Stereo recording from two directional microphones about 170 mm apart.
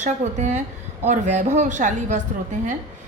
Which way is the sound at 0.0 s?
45° right (ahead or behind).